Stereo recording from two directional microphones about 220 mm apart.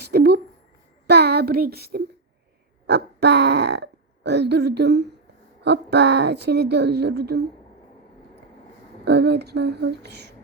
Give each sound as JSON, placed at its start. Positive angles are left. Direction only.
{"t": 0.0, "sound": "a sound", "side_deg": -45}
{"t": 2.8, "sound": "a woman's voice", "side_deg": -50}
{"t": 9.0, "sound": "a woman's voice", "side_deg": -50}